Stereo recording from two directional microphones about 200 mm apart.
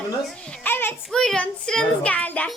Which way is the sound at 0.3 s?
10° left (ahead or behind).